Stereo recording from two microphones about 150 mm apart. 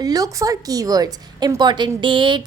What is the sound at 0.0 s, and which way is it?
A woman's voice, 25° right (ahead or behind).